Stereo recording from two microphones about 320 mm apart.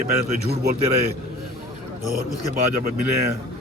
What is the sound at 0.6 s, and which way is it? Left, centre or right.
Speech, right.